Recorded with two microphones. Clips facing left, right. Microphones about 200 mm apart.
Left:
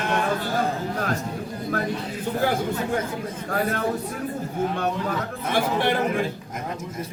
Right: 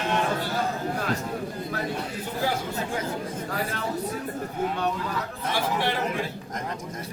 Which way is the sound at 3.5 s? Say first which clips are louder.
Left 9 dB; 50° left (ahead or behind).